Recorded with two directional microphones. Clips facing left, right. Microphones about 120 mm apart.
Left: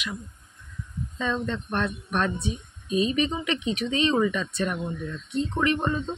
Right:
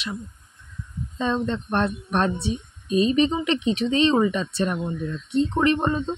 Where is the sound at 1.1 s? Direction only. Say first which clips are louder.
Right 4 dB; 30° right (ahead or behind).